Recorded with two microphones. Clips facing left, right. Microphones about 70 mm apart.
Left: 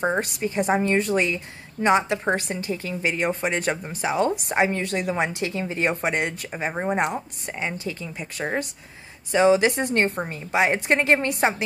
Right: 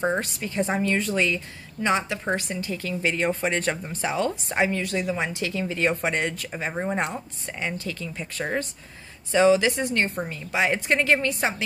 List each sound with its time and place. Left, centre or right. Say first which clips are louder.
0.0 s a woman's voice: left 2 dB; left
4.9 s a woman's voice: left 2 dB; left